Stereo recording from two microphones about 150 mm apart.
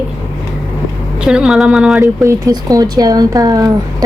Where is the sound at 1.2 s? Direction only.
5° right (ahead or behind).